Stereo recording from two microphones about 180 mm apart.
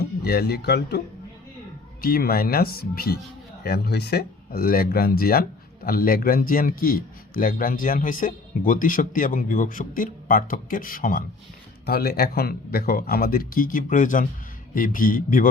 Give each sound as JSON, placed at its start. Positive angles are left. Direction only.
{"t": 0.0, "sound": "speech", "side_deg": 60}